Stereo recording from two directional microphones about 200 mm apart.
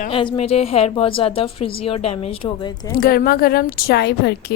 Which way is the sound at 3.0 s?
50° left (ahead or behind).